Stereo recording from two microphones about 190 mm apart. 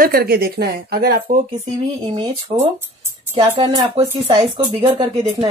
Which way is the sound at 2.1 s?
30° right (ahead or behind).